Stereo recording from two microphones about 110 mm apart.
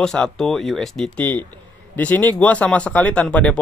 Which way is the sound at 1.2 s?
15° left (ahead or behind).